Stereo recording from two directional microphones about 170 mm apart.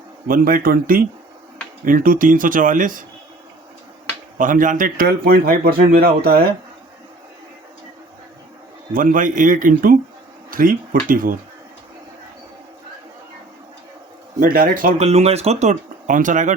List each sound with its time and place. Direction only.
0.3 s a man's voice: 55° right (ahead or behind)
4.4 s a man's voice: 50° right (ahead or behind)
8.9 s a man's voice: 55° right (ahead or behind)
14.3 s speech: 55° right (ahead or behind)